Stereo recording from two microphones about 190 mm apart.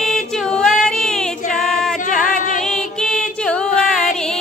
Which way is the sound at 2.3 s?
45° left (ahead or behind).